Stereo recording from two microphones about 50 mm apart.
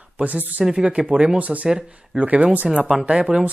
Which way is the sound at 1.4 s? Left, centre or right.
Right.